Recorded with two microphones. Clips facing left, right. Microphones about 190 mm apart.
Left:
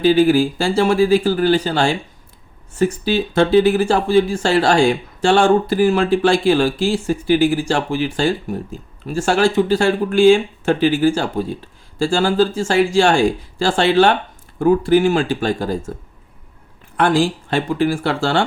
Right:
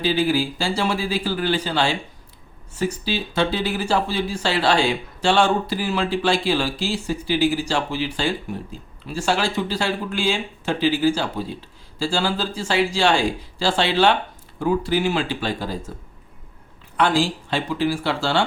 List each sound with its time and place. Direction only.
0.0 s speech: 50° left (ahead or behind)
17.5 s speech: 50° left (ahead or behind)